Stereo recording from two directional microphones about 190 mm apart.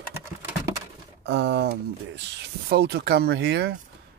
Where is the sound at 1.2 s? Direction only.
65° right (ahead or behind).